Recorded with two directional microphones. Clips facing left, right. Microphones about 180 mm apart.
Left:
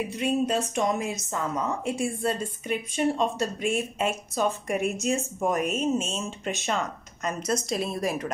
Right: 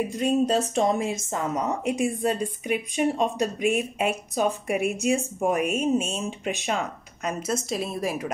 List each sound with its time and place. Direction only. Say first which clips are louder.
0.2 s speech: right 3 dB; 35° right (ahead or behind); by 8.3 s 5° right (ahead or behind)